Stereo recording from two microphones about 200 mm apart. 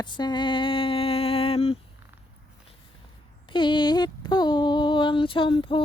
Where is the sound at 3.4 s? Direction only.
25° left (ahead or behind).